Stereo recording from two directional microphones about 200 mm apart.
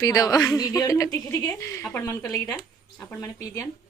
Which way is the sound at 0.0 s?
15° left (ahead or behind).